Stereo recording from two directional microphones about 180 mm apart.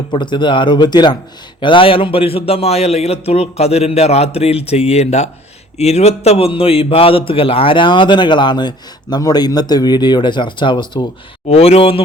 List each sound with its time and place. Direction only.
0.1 s a man's voice: 25° left (ahead or behind)